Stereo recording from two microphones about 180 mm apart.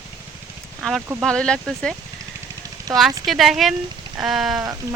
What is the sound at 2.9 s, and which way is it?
Speech, 20° right (ahead or behind).